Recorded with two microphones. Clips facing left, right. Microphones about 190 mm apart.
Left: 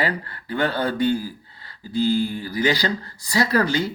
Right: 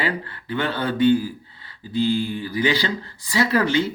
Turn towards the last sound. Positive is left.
turn(degrees=40)  # may be behind; listen again after turning